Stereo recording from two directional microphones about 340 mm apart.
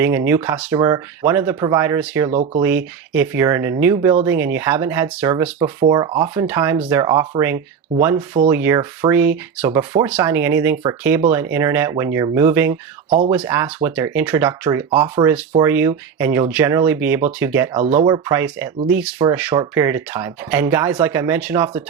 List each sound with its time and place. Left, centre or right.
0.0 s speech: centre
2.3 s speech: centre
2.6 s speech: centre
14.8 s speech: centre